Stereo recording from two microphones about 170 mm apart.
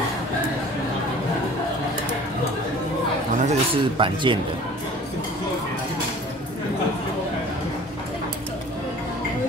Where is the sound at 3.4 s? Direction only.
30° right (ahead or behind).